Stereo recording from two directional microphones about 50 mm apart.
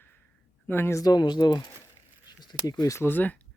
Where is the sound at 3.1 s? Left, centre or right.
Left.